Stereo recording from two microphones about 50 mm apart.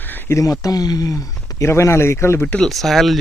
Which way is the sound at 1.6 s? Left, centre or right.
Left.